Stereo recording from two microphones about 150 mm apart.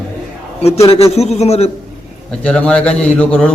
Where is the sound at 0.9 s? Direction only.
40° left (ahead or behind).